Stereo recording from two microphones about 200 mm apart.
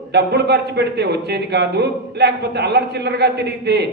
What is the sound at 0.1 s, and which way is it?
A man's voice, 55° right (ahead or behind).